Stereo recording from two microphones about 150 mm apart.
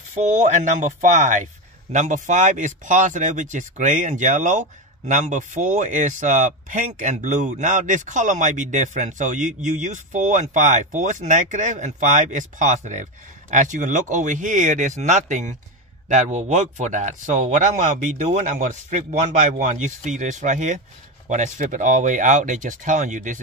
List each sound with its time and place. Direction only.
0.1 s speech: 50° right (ahead or behind)